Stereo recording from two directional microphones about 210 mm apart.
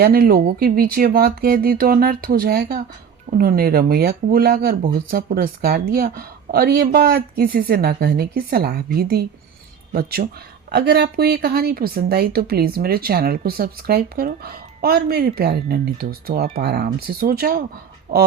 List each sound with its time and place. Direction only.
0.0 s speech: 45° right (ahead or behind)